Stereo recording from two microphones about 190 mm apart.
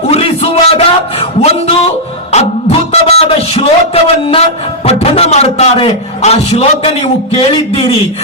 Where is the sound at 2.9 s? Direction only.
35° left (ahead or behind).